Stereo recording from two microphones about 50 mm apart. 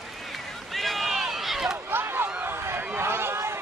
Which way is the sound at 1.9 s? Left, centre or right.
Right.